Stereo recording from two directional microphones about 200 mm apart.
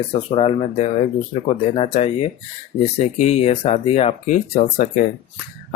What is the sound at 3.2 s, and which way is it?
Speech, 30° left (ahead or behind).